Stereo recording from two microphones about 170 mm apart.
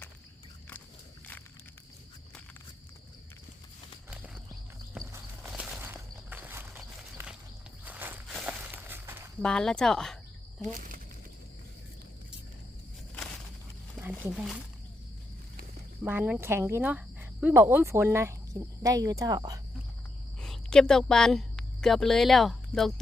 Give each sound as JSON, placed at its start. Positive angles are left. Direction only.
{"t": 4.9, "sound": "walk", "side_deg": -10}
{"t": 7.9, "sound": "walk", "side_deg": -10}
{"t": 9.4, "sound": "speech", "side_deg": 5}
{"t": 14.0, "sound": "a sound", "side_deg": -10}
{"t": 16.0, "sound": "speech", "side_deg": -10}
{"t": 20.4, "sound": "a woman's voice", "side_deg": 5}